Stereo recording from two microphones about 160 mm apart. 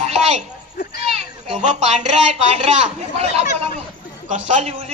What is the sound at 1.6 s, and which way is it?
A man's voice, 45° right (ahead or behind).